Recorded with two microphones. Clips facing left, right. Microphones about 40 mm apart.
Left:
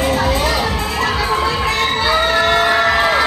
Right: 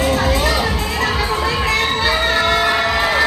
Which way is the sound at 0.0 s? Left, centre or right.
Left.